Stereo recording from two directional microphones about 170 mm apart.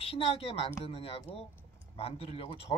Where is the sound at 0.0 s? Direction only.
35° left (ahead or behind).